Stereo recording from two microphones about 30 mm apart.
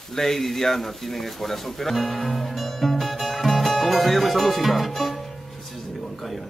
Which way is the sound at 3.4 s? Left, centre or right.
Centre.